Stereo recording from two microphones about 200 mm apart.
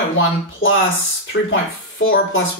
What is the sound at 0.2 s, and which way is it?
Speech, 75° left (ahead or behind).